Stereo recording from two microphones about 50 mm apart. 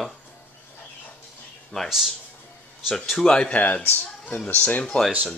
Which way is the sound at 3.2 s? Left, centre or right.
Left.